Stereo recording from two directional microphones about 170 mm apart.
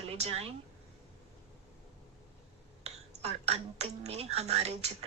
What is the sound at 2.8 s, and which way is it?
Speech, 40° right (ahead or behind).